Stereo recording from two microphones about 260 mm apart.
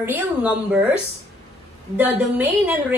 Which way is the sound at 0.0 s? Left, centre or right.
Centre.